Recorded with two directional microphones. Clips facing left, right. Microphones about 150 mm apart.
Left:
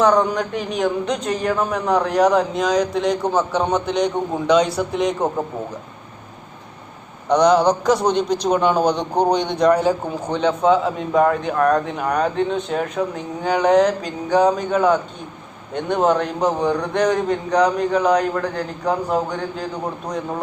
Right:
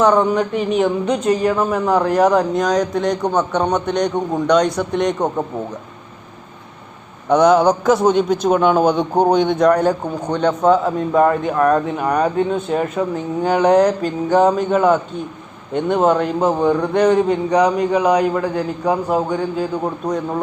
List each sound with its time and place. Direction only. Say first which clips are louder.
0.0 s speech: right 2 dB; 5° right (ahead or behind)
7.3 s a man's voice: right 2 dB; 5° right (ahead or behind)